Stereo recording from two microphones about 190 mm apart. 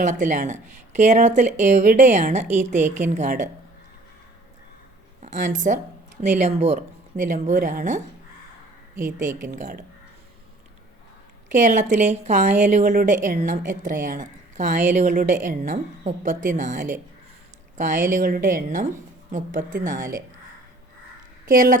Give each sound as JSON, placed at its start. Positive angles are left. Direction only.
{"t": 0.0, "sound": "a woman's voice", "side_deg": -40}
{"t": 5.2, "sound": "a woman's voice", "side_deg": -40}
{"t": 9.4, "sound": "a woman's voice", "side_deg": -45}
{"t": 11.5, "sound": "a woman's voice", "side_deg": -40}
{"t": 21.4, "sound": "a woman's voice", "side_deg": -45}